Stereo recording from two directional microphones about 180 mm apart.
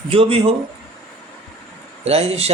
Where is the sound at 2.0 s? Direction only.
35° right (ahead or behind).